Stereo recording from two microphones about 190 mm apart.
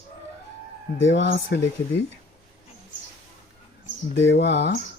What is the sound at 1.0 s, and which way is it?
Speech, 70° left (ahead or behind).